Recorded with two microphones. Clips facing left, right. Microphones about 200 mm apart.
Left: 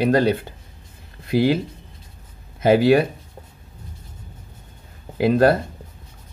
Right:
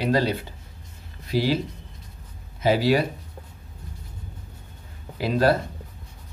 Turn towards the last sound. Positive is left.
turn(degrees=55)  # may be behind; listen again after turning